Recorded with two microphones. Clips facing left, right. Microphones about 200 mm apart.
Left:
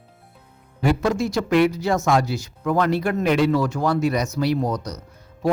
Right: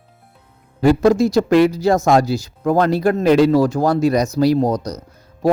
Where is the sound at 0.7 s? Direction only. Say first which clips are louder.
Right 8 dB; 40° right (ahead or behind).